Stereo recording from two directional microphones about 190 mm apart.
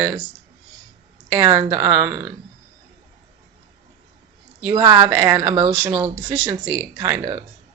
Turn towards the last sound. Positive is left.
turn(degrees=-15)  # may be behind; listen again after turning